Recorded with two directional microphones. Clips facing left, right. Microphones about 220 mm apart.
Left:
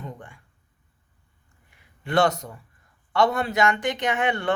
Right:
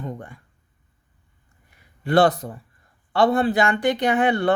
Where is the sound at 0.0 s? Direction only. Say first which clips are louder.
Right 6 dB; 40° right (ahead or behind).